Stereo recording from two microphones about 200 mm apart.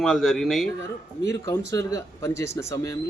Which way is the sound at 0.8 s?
15° left (ahead or behind).